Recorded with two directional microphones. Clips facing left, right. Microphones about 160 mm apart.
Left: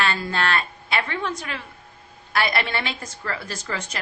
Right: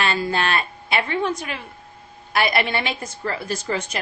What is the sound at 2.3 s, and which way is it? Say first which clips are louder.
A woman's voice: right 3 dB; 15° right (ahead or behind).